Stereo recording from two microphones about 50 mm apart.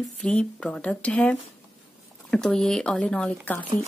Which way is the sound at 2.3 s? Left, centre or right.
Centre.